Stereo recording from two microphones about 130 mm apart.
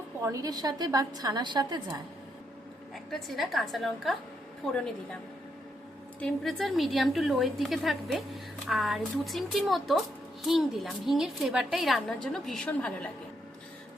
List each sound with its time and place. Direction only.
0.2 s a woman's voice: 25° right (ahead or behind)
2.9 s a woman's voice: centre (ahead or behind)
6.1 s a woman's voice: 5° left (ahead or behind)